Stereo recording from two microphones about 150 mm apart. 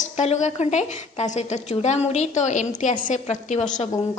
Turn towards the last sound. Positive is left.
turn(degrees=50)  # may be behind; listen again after turning